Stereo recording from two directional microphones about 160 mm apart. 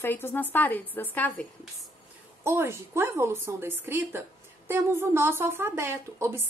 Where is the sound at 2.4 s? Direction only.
15° right (ahead or behind).